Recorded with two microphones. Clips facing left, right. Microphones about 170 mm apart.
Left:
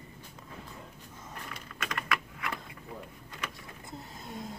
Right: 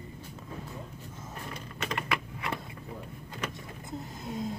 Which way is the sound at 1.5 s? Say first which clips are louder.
Right 4 dB; 25° right (ahead or behind).